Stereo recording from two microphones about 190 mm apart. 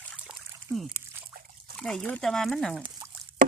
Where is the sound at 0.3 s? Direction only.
5° right (ahead or behind).